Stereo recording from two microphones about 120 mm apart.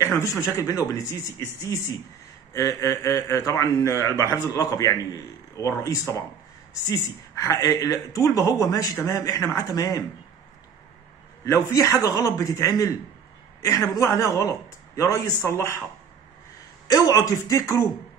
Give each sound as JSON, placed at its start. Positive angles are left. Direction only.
{"t": 0.2, "sound": "a man's voice", "side_deg": 25}
{"t": 11.4, "sound": "a man's voice", "side_deg": 25}
{"t": 16.8, "sound": "a man's voice", "side_deg": 30}